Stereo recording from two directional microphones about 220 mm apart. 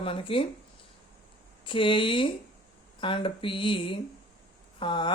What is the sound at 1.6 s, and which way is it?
Speech, 25° left (ahead or behind).